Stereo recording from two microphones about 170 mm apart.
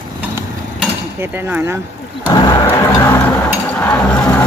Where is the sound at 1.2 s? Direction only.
10° right (ahead or behind).